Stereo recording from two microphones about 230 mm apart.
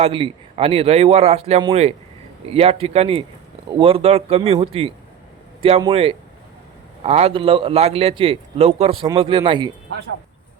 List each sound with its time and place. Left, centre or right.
0.0 s a man's voice: right